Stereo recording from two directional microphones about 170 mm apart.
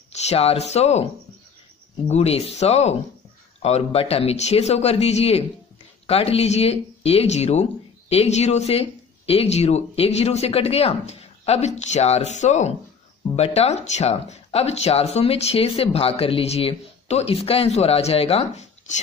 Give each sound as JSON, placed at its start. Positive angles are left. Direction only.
{"t": 0.1, "sound": "speech", "side_deg": 35}
{"t": 2.0, "sound": "speech", "side_deg": 40}